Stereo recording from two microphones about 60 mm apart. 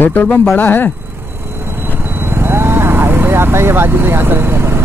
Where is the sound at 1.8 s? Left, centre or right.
Right.